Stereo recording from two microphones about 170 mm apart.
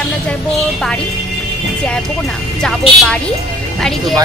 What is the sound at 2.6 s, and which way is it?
Speech, 5° left (ahead or behind).